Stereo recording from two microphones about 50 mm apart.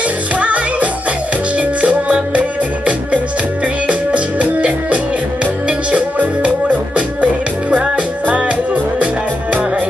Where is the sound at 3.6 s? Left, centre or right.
Right.